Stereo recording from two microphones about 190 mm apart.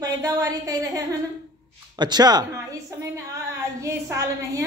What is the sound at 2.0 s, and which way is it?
Speech, 20° right (ahead or behind).